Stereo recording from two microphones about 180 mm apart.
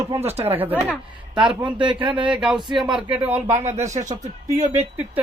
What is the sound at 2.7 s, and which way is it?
Speech, 25° right (ahead or behind).